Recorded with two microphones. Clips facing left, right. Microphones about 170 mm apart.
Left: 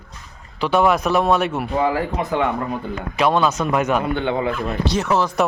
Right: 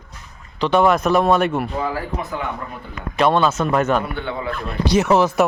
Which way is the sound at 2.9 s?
5° left (ahead or behind).